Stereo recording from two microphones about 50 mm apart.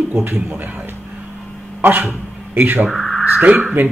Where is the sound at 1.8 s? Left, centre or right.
Right.